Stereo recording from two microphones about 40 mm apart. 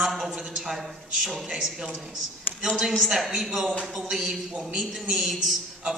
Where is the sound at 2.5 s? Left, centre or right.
Left.